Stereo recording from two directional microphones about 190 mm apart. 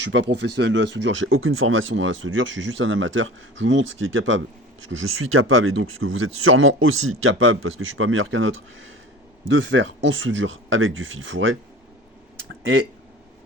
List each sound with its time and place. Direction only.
0.0 s speech: 75° right (ahead or behind); by 11.5 s 90° right